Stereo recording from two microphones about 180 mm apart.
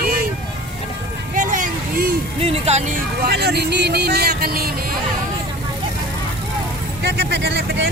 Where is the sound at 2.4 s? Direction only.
35° right (ahead or behind).